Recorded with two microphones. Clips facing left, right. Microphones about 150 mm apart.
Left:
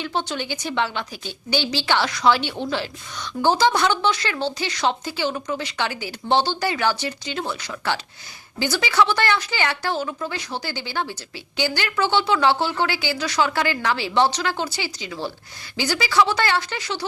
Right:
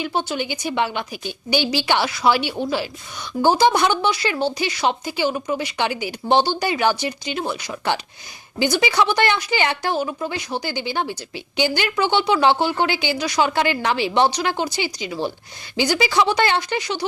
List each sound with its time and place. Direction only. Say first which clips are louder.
0.0 s a woman's voice: right 3 dB; 10° right (ahead or behind)